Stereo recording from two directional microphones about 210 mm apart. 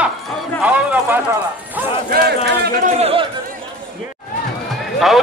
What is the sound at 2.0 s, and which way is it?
Speech, 45° right (ahead or behind).